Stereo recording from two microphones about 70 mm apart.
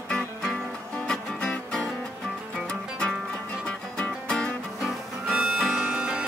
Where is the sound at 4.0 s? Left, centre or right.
Centre.